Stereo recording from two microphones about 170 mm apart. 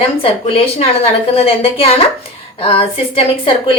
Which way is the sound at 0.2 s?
35° left (ahead or behind).